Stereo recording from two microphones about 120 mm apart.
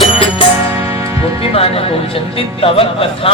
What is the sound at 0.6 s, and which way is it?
Music, 25° right (ahead or behind).